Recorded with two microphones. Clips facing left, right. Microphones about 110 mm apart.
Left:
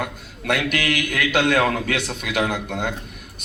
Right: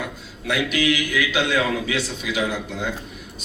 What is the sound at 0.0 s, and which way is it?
A man's voice, 60° left (ahead or behind).